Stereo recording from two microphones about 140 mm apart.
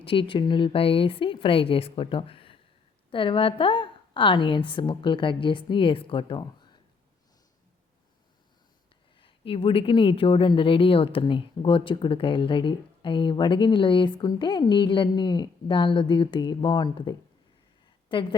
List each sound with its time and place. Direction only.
0.0 s a woman's voice: 40° left (ahead or behind)
6.4 s a sound: 35° left (ahead or behind)
9.1 s a woman's voice: 40° left (ahead or behind)